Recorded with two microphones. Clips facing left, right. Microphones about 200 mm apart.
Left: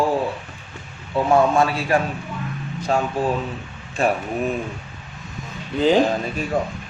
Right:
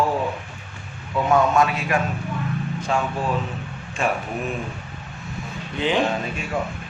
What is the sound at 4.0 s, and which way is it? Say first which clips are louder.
Speech: left 3 dB; 35° left (ahead or behind).